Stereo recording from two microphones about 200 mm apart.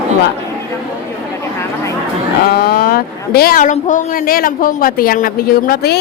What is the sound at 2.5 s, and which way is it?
Speech, 50° left (ahead or behind).